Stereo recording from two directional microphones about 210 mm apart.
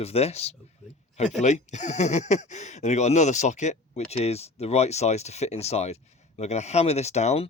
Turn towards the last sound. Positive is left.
turn(degrees=30)  # may be behind; listen again after turning